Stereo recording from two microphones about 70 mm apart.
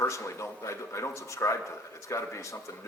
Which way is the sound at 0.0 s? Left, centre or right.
Left.